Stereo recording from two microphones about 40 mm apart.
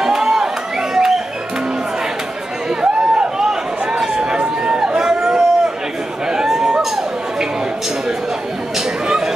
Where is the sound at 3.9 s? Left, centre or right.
Right.